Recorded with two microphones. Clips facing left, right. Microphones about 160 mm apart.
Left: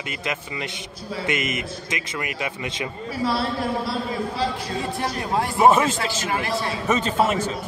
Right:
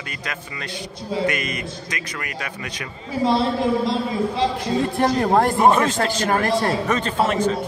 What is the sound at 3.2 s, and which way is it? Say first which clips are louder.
Speech: right 5 dB; 25° right (ahead or behind).